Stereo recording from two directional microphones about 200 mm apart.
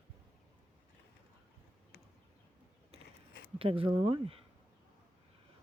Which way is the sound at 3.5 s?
25° right (ahead or behind).